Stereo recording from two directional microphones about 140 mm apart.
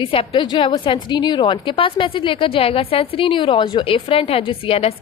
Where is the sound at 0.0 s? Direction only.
45° left (ahead or behind).